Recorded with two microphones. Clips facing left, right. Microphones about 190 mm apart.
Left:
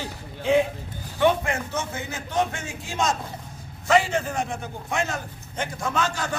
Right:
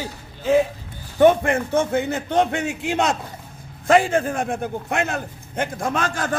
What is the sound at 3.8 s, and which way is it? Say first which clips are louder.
A man's voice: right 4 dB; 50° right (ahead or behind).